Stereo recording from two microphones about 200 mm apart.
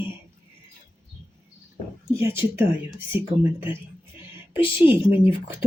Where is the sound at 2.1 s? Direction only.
10° right (ahead or behind).